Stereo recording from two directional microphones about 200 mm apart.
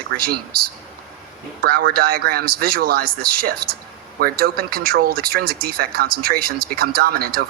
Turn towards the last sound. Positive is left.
turn(degrees=-50)  # may be behind; listen again after turning